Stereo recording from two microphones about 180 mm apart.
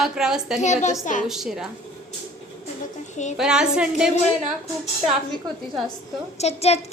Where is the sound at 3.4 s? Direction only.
5° right (ahead or behind).